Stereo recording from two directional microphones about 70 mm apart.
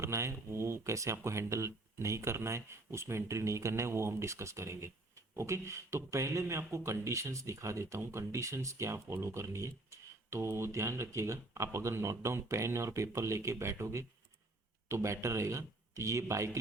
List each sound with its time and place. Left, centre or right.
0.0 s speech: right